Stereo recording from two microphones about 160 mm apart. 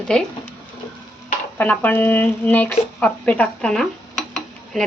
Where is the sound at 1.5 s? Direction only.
10° left (ahead or behind).